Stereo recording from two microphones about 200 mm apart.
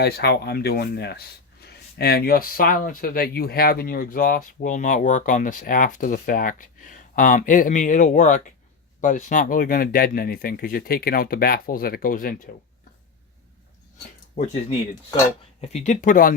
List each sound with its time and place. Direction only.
0.0 s speech: 50° left (ahead or behind)
14.3 s speech: 35° left (ahead or behind)